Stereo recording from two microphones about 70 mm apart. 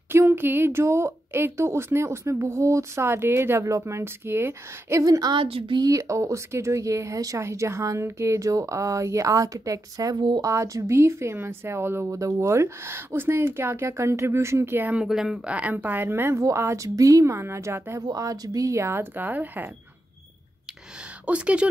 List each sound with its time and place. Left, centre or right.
0.1 s a woman's voice: right
5.0 s speech: right
5.9 s speech: right
10.4 s a woman's voice: right
15.0 s speech: centre
15.4 s a woman's voice: centre; by 18.0 s right
18.2 s a woman's voice: right
21.3 s speech: centre